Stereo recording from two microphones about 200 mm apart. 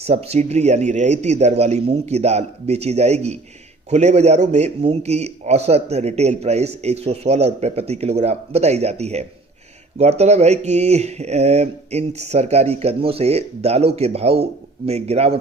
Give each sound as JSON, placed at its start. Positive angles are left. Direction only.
{"t": 0.0, "sound": "a man's voice", "side_deg": -30}